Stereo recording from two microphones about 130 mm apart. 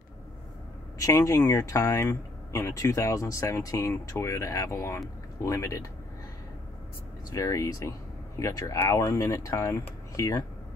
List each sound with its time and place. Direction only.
0.9 s speech: 25° left (ahead or behind)
7.2 s speech: 25° left (ahead or behind)